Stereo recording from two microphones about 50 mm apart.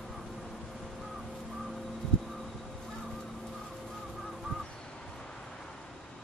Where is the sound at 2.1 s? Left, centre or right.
Centre.